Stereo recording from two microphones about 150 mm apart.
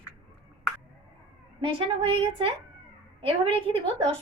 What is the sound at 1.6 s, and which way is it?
Speech, 35° right (ahead or behind).